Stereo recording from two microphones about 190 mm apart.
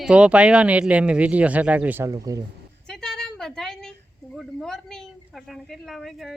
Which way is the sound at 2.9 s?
5° left (ahead or behind).